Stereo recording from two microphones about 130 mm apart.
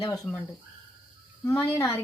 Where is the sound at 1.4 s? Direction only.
25° left (ahead or behind).